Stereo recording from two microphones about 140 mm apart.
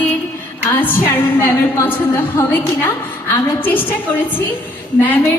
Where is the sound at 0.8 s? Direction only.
15° left (ahead or behind).